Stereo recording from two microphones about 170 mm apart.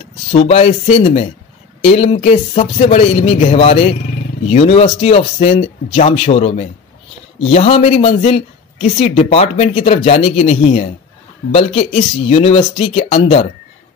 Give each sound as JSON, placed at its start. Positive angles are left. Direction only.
{"t": 0.3, "sound": "speech", "side_deg": 35}